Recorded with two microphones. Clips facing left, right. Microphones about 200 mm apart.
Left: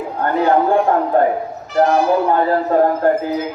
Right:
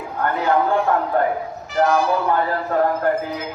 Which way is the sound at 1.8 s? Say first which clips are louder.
Left 4 dB; 35° left (ahead or behind).